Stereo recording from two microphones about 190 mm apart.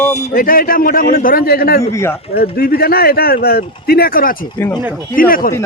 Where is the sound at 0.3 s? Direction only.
50° left (ahead or behind).